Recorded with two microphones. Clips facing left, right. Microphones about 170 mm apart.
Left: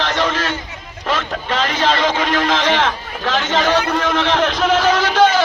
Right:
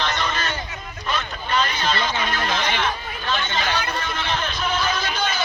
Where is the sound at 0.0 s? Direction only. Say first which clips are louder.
Left 6 dB; 90° left.